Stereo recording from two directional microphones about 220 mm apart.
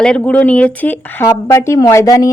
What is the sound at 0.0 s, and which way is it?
Speech, 5° left (ahead or behind).